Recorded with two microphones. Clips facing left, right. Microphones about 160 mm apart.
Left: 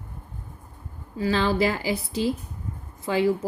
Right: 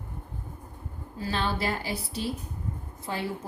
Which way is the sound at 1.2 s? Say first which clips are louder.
Left 7 dB; 90° left.